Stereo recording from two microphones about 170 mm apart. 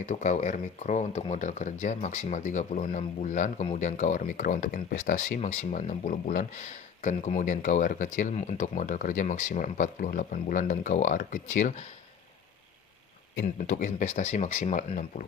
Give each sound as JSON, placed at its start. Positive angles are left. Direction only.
{"t": 0.0, "sound": "speech", "side_deg": 45}
{"t": 13.4, "sound": "speech", "side_deg": 50}